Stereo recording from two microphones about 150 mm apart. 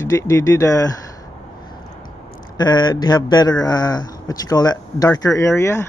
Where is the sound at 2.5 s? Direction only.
30° left (ahead or behind).